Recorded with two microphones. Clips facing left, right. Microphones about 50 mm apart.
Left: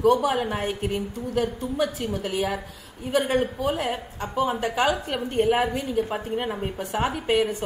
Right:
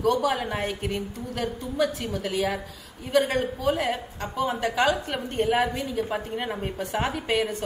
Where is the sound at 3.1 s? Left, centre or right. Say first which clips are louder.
Even; centre.